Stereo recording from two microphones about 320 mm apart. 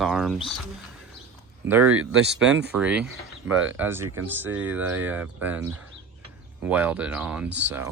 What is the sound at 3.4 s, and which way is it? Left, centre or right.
Speech, right.